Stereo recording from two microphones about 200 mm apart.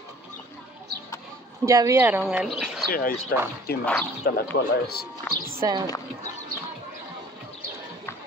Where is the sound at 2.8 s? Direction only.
45° left (ahead or behind).